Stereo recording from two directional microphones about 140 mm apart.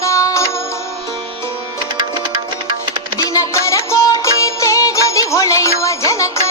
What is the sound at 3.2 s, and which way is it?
Music, 25° left (ahead or behind).